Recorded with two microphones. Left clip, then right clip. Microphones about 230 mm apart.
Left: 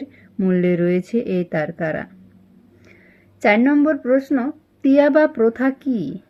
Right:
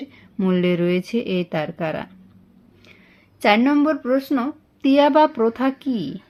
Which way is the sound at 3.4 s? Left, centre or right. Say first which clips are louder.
Left 1 dB; centre.